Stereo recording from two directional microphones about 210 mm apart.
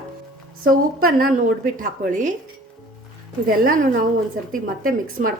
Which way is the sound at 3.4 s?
40° right (ahead or behind).